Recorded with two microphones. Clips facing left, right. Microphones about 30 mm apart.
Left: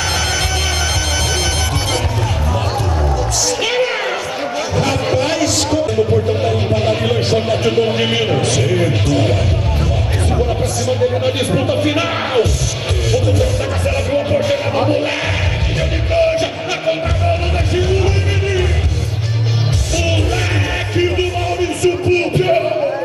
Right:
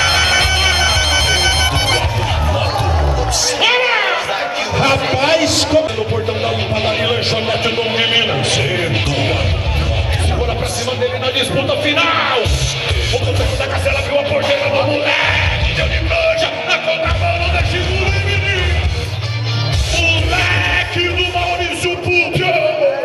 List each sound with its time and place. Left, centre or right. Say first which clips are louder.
0.0 s music: right 5 dB; right
3.4 s music: right 4 dB; right
4.7 s a sound: right 2 dB; right
10.9 s music: left 2 dB; right
20.0 s music: right 4 dB; right